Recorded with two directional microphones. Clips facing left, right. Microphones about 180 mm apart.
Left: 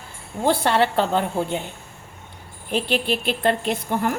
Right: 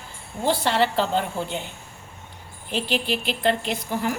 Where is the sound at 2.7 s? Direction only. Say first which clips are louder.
Left 3 dB; 55° left (ahead or behind).